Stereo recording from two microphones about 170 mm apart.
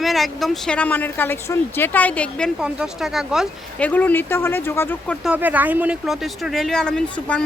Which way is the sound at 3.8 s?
10° left (ahead or behind).